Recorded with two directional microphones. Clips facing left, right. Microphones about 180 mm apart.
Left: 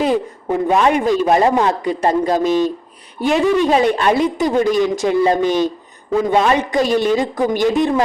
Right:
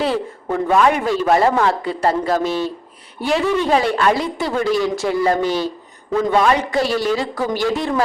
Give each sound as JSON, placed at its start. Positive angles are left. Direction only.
{"t": 0.0, "sound": "a man's voice", "side_deg": 15}